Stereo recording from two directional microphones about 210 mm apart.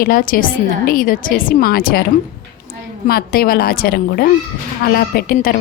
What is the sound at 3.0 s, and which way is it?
A woman's voice, 45° left (ahead or behind).